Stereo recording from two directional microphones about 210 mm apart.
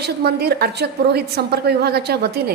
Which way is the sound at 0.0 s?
50° right (ahead or behind).